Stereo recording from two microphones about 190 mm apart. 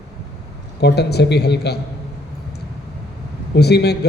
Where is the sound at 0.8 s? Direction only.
60° left (ahead or behind).